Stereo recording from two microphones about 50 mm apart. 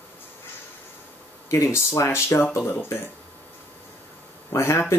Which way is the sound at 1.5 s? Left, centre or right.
Left.